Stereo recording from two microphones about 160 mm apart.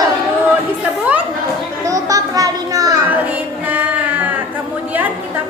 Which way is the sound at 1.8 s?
20° right (ahead or behind).